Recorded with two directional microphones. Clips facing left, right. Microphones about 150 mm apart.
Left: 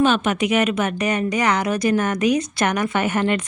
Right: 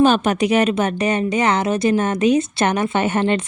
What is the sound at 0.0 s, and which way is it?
Speech, 35° right (ahead or behind).